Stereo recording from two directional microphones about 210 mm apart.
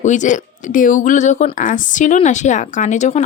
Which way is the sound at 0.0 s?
35° left (ahead or behind).